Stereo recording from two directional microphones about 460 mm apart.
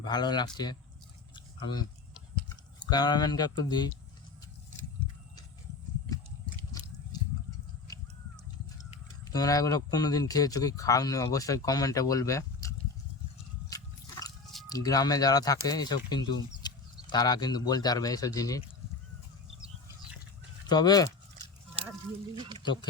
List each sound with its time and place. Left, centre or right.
0.0 s speech: centre
9.3 s speech: centre
13.7 s a sound: centre
16.6 s speech: centre
20.7 s speech: centre
22.4 s speech: centre
22.6 s speech: centre